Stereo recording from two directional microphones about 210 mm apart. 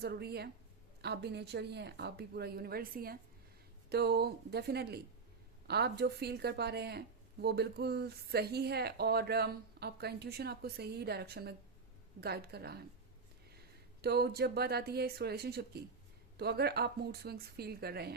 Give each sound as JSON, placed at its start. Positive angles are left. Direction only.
{"t": 0.0, "sound": "speech", "side_deg": -50}